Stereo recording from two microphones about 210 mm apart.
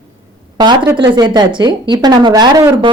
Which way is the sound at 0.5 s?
20° right (ahead or behind).